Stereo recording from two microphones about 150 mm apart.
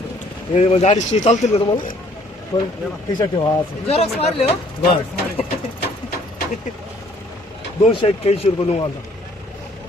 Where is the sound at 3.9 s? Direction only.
45° left (ahead or behind).